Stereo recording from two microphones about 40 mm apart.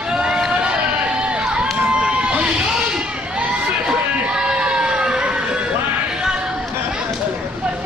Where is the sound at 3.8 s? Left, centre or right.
Right.